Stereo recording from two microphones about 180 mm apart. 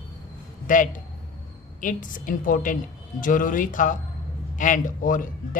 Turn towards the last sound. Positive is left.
turn(degrees=50)  # may be behind; listen again after turning